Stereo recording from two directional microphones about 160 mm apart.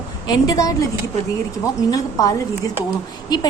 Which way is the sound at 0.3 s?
20° left (ahead or behind).